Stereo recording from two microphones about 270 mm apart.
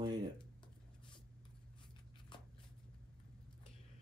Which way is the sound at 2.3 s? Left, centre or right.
Centre.